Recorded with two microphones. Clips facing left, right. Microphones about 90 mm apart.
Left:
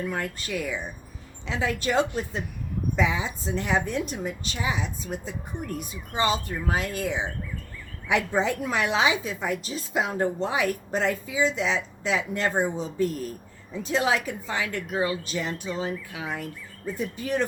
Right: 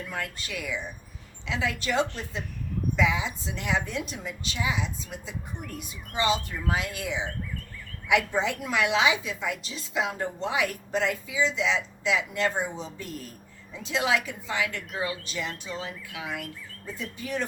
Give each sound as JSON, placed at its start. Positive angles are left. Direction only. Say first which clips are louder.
{"t": 0.1, "sound": "a woman's voice", "louder": "left 4 dB", "side_deg": 35}
{"t": 13.8, "sound": "a woman's voice", "louder": "left 2 dB", "side_deg": 40}